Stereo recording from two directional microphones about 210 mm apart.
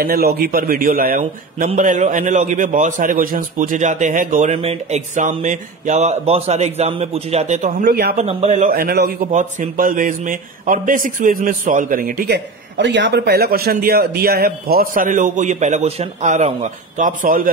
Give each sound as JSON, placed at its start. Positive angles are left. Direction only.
{"t": 0.0, "sound": "a man's voice", "side_deg": -45}
{"t": 7.8, "sound": "a man's voice", "side_deg": -45}
{"t": 8.3, "sound": "a man's voice", "side_deg": -30}
{"t": 9.3, "sound": "a man's voice", "side_deg": -35}